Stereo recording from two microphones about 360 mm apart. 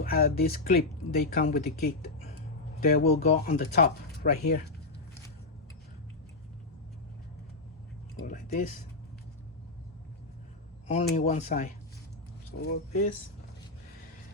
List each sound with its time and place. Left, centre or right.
0.0 s speech: left
8.2 s a sound: left
10.8 s speech: centre